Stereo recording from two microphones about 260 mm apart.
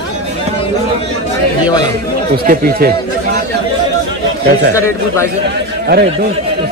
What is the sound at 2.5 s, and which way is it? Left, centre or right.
Speech, right.